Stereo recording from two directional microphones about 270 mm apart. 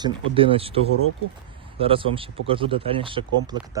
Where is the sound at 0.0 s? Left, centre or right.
Centre.